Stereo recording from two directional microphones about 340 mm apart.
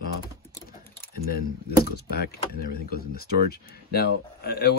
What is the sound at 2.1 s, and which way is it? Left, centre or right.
Speech, left.